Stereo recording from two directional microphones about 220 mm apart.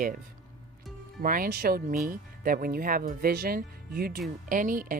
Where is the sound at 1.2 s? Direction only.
40° right (ahead or behind).